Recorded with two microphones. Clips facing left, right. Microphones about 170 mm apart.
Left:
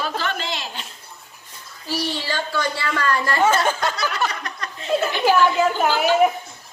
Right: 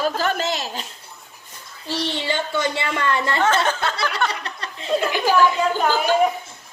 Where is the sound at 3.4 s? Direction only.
10° left (ahead or behind).